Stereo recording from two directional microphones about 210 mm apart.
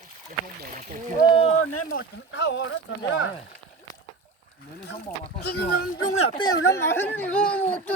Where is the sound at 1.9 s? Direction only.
50° left (ahead or behind).